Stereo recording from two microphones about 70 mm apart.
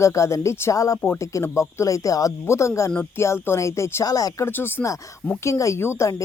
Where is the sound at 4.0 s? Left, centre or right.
Left.